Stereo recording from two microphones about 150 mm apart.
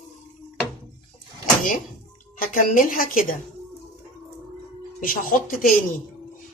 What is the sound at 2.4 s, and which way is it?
Speech, 65° left (ahead or behind).